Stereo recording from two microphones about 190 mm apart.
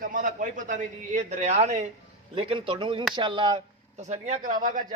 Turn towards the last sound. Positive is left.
turn(degrees=-45)  # may be behind; listen again after turning